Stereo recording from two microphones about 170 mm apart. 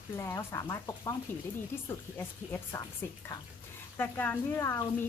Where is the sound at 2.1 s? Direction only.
10° left (ahead or behind).